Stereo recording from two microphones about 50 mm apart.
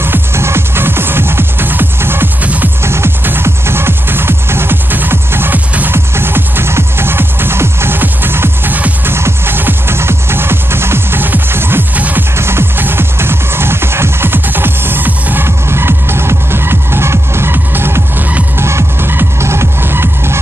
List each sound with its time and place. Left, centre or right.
0.0 s music: right
2.4 s music: right
2.8 s music: right
8.0 s music: right
12.4 s music: right
15.4 s music: right
18.6 s music: right